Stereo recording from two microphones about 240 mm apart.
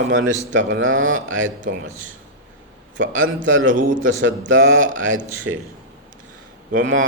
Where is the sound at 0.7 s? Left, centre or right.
Right.